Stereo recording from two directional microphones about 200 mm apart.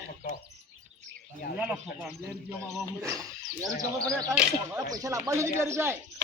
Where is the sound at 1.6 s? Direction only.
10° right (ahead or behind).